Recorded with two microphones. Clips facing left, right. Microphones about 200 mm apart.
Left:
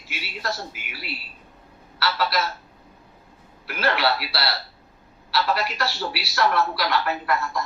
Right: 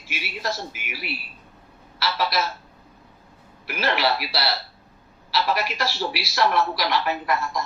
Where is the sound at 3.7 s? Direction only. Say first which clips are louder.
Even; 15° right (ahead or behind).